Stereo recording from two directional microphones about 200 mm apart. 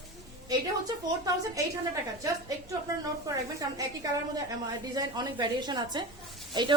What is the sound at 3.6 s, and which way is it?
A woman's voice, 15° right (ahead or behind).